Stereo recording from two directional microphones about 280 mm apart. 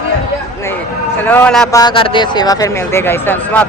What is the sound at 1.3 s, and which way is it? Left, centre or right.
Speech, centre.